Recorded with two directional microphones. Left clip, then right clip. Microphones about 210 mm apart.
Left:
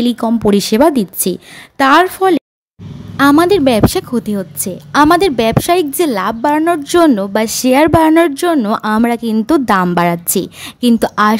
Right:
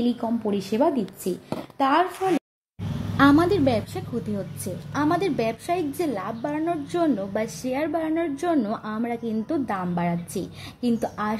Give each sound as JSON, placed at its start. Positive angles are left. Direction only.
{"t": 0.2, "sound": "a woman's voice", "side_deg": 40}